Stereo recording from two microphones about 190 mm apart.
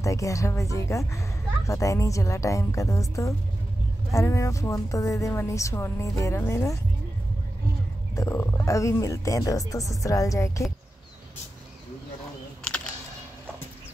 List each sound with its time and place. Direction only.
0.0 s speech: 15° left (ahead or behind)
8.2 s speech: 15° left (ahead or behind)